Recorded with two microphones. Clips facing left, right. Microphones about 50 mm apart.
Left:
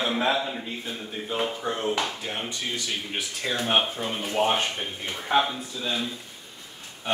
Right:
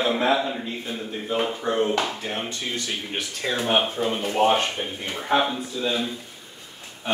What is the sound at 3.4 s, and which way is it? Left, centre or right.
Speech, centre.